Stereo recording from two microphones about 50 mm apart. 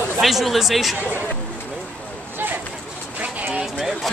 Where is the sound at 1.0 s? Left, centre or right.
Right.